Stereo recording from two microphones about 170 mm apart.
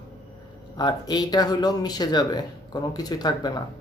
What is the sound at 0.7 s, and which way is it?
Speech, 25° left (ahead or behind).